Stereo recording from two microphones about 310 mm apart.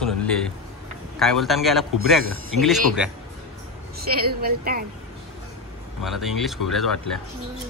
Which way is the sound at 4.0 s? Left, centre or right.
Right.